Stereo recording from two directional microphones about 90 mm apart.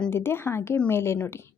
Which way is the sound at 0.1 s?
25° left (ahead or behind).